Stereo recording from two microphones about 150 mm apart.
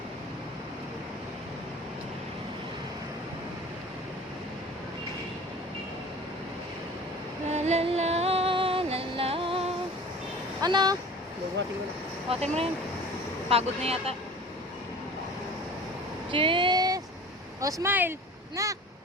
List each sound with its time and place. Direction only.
7.5 s music: 45° right (ahead or behind)
10.6 s speech: 30° right (ahead or behind)
12.3 s speech: 40° right (ahead or behind)
16.3 s a sound: 35° right (ahead or behind)
17.6 s speech: 20° right (ahead or behind)